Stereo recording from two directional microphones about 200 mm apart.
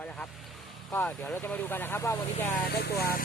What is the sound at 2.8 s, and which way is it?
Speech, 50° left (ahead or behind).